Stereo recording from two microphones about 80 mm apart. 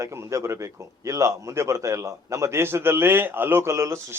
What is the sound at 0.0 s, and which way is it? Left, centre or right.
A man's voice, right.